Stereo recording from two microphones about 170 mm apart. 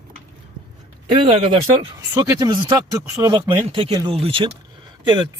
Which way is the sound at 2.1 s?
20° right (ahead or behind).